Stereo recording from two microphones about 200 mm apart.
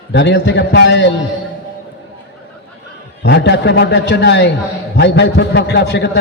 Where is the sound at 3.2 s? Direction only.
60° left (ahead or behind).